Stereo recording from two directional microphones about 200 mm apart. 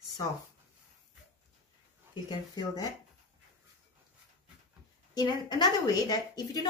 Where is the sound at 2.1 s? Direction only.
20° left (ahead or behind).